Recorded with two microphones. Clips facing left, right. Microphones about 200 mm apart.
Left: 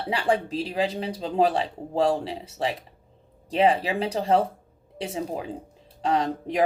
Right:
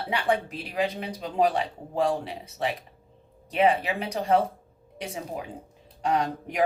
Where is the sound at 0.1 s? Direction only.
30° left (ahead or behind).